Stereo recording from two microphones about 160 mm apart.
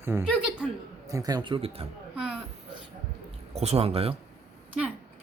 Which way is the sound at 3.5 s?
40° right (ahead or behind).